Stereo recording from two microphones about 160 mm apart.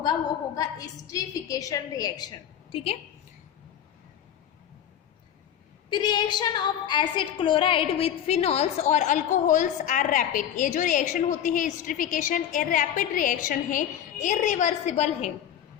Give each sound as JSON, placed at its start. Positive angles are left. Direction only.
{"t": 0.5, "sound": "a woman's voice", "side_deg": 20}
{"t": 5.9, "sound": "a woman's voice", "side_deg": 25}